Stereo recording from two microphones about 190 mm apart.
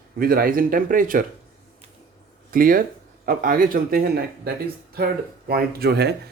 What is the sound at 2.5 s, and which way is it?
Speech, 50° right (ahead or behind).